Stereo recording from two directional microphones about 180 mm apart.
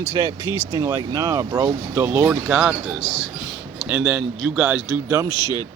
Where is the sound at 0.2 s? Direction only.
15° right (ahead or behind).